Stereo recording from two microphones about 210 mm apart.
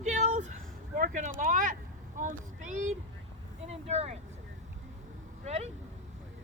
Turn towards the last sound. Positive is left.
turn(degrees=-30)  # may be behind; listen again after turning